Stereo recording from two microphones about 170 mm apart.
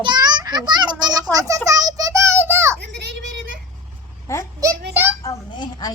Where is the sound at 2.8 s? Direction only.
90° right.